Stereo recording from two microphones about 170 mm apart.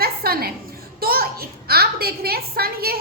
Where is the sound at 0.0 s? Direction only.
60° right (ahead or behind).